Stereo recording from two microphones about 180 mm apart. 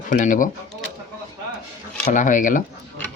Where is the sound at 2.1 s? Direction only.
45° left (ahead or behind).